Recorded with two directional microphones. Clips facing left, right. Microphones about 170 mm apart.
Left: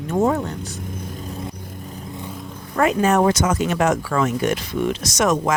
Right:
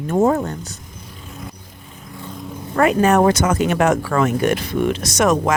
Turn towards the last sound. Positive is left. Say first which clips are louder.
# right 2 dB
turn(degrees=-60)  # may be behind; listen again after turning